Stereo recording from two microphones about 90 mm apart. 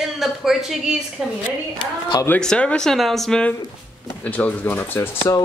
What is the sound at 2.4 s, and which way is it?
Speech, 10° left (ahead or behind).